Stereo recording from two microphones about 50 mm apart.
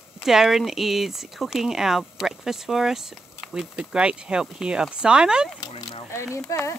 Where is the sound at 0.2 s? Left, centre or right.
Centre.